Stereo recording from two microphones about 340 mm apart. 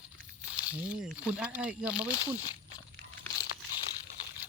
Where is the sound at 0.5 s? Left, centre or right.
Centre.